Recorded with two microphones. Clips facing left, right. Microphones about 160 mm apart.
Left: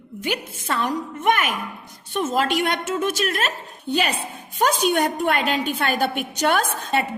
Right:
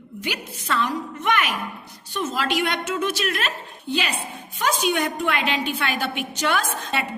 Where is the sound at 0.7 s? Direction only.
50° left (ahead or behind).